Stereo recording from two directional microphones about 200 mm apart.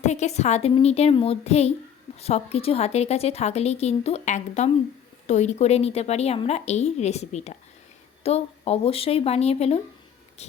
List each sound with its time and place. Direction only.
0.0 s a woman's voice: 35° left (ahead or behind)